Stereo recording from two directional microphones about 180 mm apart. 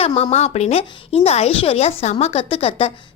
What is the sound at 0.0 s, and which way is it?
Speech, 35° left (ahead or behind).